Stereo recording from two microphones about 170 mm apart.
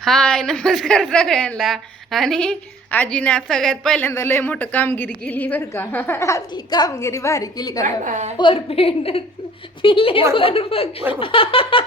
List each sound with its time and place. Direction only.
0.0 s a woman's voice: 5° left (ahead or behind); by 7.9 s 20° left (ahead or behind)
8.0 s a woman's voice: 45° right (ahead or behind)
8.4 s a woman's voice: 30° left (ahead or behind)